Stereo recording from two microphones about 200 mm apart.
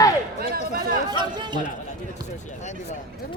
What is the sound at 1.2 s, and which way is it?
Speech, 20° right (ahead or behind).